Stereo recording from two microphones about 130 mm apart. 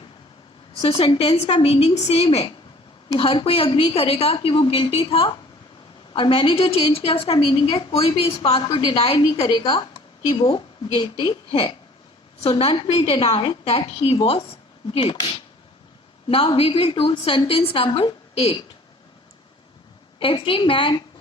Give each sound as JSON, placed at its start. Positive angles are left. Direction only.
{"t": 0.8, "sound": "a woman's voice", "side_deg": 50}
{"t": 16.3, "sound": "a woman's voice", "side_deg": 45}
{"t": 20.1, "sound": "a woman's voice", "side_deg": 40}